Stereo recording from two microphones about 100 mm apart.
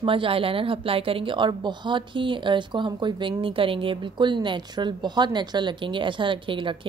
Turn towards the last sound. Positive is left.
turn(degrees=-55)  # may be behind; listen again after turning